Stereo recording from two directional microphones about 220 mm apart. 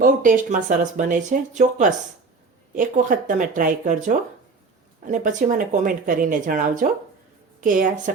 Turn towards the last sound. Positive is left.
turn(degrees=-35)  # may be behind; listen again after turning